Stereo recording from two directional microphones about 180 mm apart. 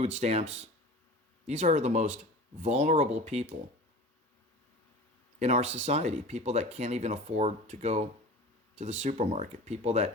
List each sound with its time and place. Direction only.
0.0 s speech: 40° right (ahead or behind)
5.4 s speech: 40° right (ahead or behind)